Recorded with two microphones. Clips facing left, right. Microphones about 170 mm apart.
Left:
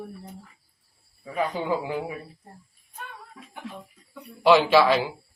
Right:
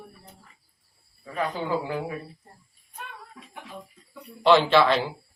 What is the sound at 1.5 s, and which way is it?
Speech, 20° left (ahead or behind).